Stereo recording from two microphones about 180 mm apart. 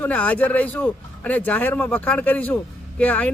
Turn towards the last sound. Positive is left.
turn(degrees=10)  # may be behind; listen again after turning